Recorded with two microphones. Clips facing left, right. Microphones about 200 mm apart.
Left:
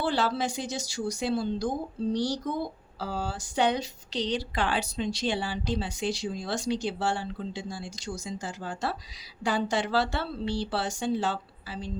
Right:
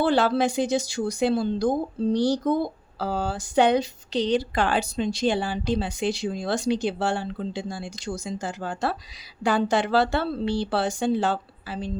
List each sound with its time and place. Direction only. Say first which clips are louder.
0.0 s speech: right 7 dB; 60° right (ahead or behind)